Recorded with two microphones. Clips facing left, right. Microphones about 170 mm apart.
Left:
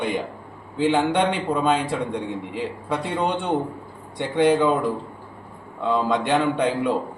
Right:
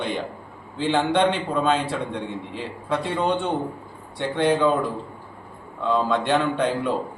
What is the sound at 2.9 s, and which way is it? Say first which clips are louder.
A man's voice: right 2 dB; 5° left (ahead or behind).